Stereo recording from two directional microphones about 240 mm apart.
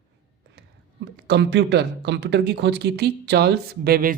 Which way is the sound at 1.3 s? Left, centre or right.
Right.